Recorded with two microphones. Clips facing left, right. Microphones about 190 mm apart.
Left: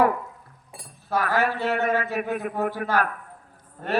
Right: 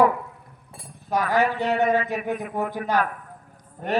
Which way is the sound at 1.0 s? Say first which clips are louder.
Right 2 dB; 15° right (ahead or behind).